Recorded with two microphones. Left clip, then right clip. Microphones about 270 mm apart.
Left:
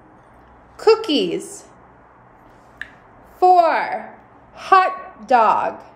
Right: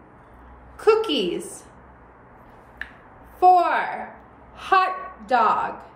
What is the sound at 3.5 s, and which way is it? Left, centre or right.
A woman's voice, left.